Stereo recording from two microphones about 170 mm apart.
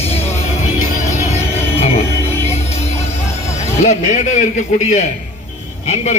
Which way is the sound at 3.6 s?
40° left (ahead or behind).